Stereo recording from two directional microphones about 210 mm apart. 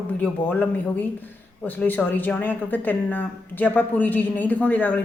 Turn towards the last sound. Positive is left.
turn(degrees=10)  # may be behind; listen again after turning